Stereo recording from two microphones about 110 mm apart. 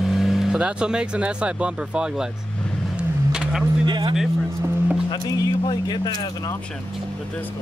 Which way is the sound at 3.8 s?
40° right (ahead or behind).